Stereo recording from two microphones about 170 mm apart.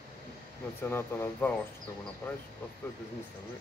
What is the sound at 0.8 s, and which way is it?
Speech, 15° left (ahead or behind).